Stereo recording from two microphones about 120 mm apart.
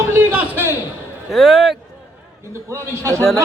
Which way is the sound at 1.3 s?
5° right (ahead or behind).